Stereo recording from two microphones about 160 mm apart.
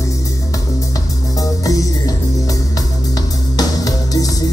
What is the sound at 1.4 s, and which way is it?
Music, 20° left (ahead or behind).